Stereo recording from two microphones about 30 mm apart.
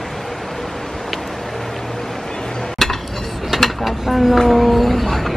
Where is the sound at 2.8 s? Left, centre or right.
Centre.